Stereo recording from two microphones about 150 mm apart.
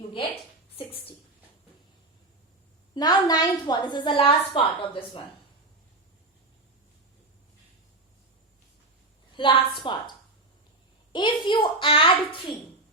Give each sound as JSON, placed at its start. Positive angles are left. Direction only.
{"t": 0.8, "sound": "speech", "side_deg": 40}
{"t": 2.9, "sound": "a woman's voice", "side_deg": 25}
{"t": 9.3, "sound": "a woman's voice", "side_deg": 35}
{"t": 11.1, "sound": "a woman's voice", "side_deg": 30}